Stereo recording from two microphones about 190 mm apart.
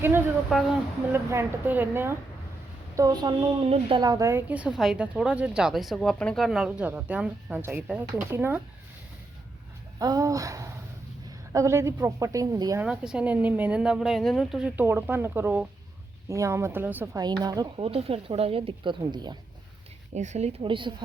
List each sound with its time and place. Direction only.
0.5 s speech: centre (ahead or behind)
1.1 s a woman's voice: 15° right (ahead or behind)
10.0 s a woman's voice: 20° right (ahead or behind)
12.8 s a woman's voice: 5° right (ahead or behind)
17.2 s speech: 20° right (ahead or behind)
20.1 s a woman's voice: 40° right (ahead or behind)